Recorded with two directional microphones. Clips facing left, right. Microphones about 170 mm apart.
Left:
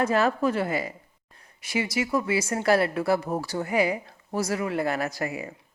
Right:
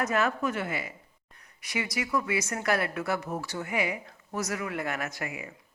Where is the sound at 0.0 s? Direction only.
30° left (ahead or behind).